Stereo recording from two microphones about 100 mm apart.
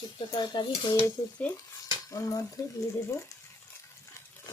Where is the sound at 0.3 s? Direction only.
50° left (ahead or behind).